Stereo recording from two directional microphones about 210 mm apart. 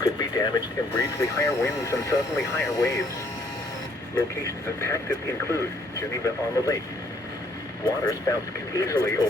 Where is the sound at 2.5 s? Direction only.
15° left (ahead or behind).